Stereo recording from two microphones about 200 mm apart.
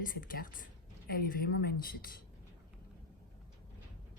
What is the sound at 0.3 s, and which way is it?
Speech, 45° left (ahead or behind).